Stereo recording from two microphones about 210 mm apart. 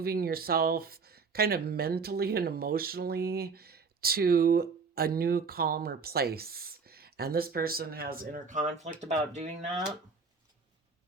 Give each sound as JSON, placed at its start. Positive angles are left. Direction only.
{"t": 0.0, "sound": "speech", "side_deg": -45}